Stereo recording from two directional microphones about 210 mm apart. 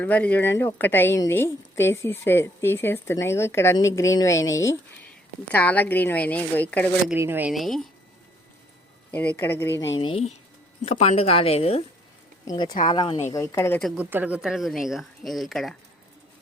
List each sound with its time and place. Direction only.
0.0 s a woman's voice: 5° left (ahead or behind)
7.1 s speech: 10° right (ahead or behind)
9.1 s a woman's voice: 10° left (ahead or behind)
10.0 s speech: 25° left (ahead or behind)
12.5 s a woman's voice: 20° left (ahead or behind)
13.9 s speech: 10° right (ahead or behind)